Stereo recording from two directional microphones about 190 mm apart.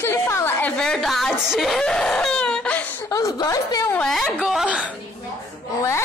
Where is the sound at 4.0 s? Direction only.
Centre (ahead or behind).